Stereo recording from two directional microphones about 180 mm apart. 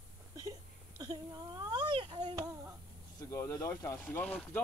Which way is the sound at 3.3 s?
15° left (ahead or behind).